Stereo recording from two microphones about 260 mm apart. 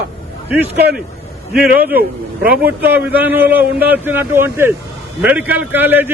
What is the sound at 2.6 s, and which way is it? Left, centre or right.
A man's voice, centre.